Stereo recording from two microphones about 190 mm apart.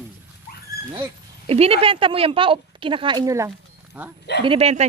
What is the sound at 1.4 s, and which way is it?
A woman's voice, 30° right (ahead or behind).